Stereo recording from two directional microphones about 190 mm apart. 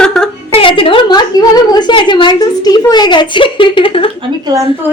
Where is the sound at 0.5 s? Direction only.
30° left (ahead or behind).